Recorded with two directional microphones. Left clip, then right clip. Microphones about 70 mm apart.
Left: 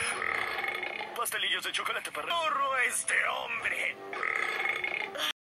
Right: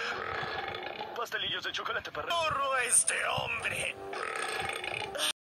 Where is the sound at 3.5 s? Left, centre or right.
Right.